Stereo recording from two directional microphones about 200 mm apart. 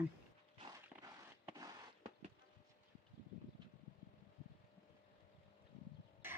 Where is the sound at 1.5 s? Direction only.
30° right (ahead or behind).